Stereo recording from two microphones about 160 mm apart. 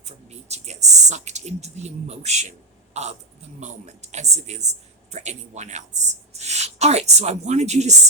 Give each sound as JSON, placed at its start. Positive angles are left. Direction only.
{"t": 0.0, "sound": "a woman's voice", "side_deg": -45}